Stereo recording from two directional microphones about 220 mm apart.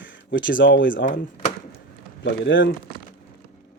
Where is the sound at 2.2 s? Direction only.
55° left (ahead or behind).